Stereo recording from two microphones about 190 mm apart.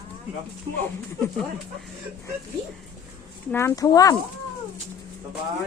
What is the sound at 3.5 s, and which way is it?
Speech, 15° left (ahead or behind).